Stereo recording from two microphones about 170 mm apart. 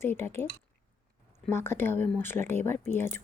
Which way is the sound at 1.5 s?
15° left (ahead or behind).